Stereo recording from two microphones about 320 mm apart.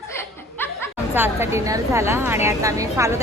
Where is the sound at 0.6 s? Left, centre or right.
Centre.